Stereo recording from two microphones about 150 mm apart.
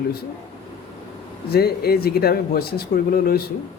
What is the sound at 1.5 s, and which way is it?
Speech, 90° left.